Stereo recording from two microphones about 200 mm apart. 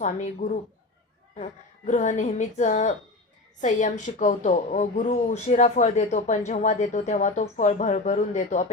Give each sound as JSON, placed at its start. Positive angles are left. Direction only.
{"t": 0.0, "sound": "speech", "side_deg": 35}